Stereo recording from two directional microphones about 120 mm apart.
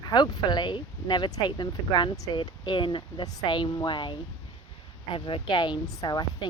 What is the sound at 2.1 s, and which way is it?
Speech, 30° left (ahead or behind).